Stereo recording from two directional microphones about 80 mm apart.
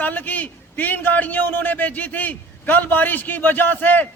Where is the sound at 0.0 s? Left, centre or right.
Left.